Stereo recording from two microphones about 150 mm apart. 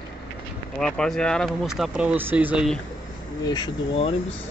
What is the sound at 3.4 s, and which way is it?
Speech, 25° left (ahead or behind).